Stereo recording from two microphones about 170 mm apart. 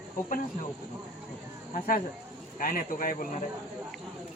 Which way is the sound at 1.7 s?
55° left (ahead or behind).